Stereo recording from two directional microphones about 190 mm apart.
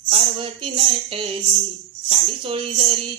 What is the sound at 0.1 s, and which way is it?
Speech, 30° right (ahead or behind).